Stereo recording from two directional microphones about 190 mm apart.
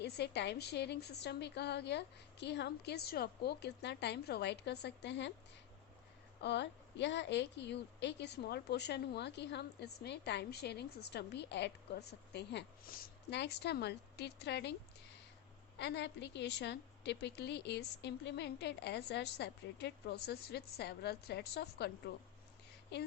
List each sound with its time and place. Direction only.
0.0 s a woman's voice: 65° left (ahead or behind)
6.4 s a woman's voice: 65° left (ahead or behind)
15.8 s a woman's voice: 65° left (ahead or behind)